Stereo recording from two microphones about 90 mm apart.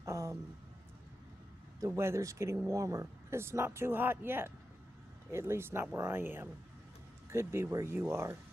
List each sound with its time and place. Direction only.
0.0 s a sound: 30° right (ahead or behind)
1.8 s speech: 30° right (ahead or behind)
2.7 s speech: 35° right (ahead or behind)